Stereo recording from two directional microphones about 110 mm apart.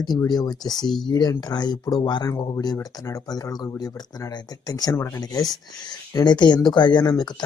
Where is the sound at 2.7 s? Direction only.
25° left (ahead or behind).